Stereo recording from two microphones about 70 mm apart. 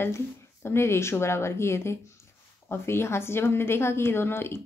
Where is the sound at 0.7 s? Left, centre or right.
Left.